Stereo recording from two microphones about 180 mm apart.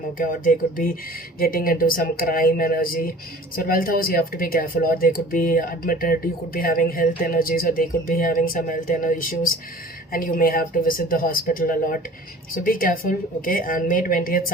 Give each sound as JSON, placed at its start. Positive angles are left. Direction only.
{"t": 0.2, "sound": "speech", "side_deg": 50}